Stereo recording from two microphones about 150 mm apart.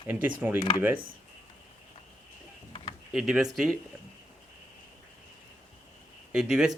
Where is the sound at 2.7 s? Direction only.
35° left (ahead or behind).